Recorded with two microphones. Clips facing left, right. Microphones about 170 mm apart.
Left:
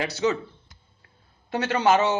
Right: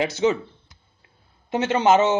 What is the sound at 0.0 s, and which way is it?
Speech, 20° right (ahead or behind).